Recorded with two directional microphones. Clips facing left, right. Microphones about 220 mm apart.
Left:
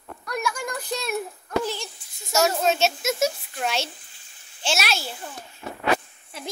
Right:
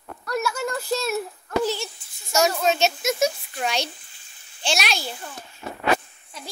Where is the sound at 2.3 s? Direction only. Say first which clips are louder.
Even; 5° left (ahead or behind).